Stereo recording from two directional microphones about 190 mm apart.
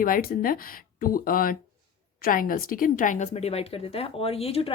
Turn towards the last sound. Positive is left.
turn(degrees=30)  # may be behind; listen again after turning